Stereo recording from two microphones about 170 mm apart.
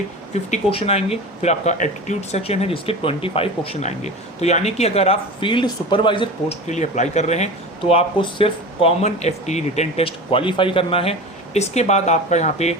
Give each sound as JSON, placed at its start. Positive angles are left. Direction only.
{"t": 0.3, "sound": "speech", "side_deg": 35}
{"t": 6.7, "sound": "speech", "side_deg": 45}